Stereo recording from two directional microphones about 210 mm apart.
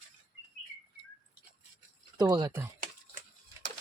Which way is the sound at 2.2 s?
20° right (ahead or behind).